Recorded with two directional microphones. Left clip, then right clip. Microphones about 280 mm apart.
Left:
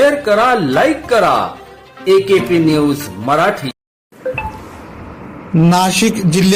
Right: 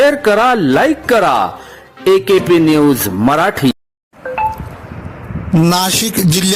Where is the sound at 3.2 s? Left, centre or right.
Right.